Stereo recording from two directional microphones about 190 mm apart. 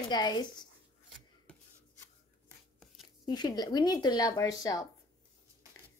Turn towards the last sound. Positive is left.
turn(degrees=20)  # may be behind; listen again after turning